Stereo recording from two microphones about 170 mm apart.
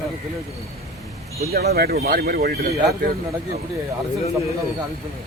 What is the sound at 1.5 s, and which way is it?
Speech, 65° right (ahead or behind).